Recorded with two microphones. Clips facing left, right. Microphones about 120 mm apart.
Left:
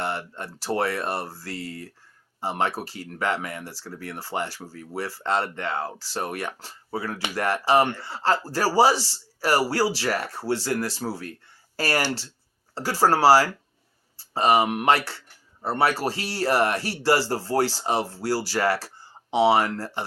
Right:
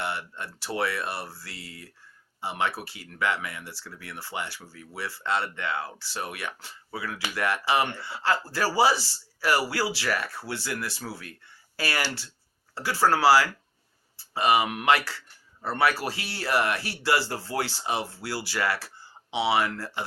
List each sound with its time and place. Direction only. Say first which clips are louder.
0.0 s speech: left 3 dB; 40° left (ahead or behind)